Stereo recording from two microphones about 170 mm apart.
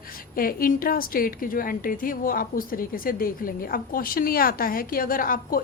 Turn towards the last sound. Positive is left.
turn(degrees=55)  # may be behind; listen again after turning